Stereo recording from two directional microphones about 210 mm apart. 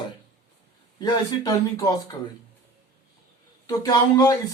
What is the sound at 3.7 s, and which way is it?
Speech, 15° left (ahead or behind).